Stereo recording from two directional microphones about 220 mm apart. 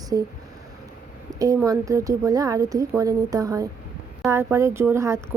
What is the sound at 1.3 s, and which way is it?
Speech, 15° right (ahead or behind).